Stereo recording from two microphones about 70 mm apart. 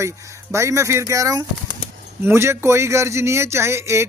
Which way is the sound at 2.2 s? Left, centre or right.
Right.